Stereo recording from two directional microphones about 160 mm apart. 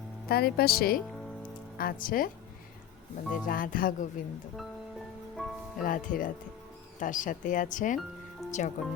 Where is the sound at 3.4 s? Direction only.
60° left (ahead or behind).